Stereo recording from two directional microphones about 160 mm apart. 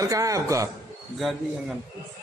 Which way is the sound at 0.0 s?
20° right (ahead or behind).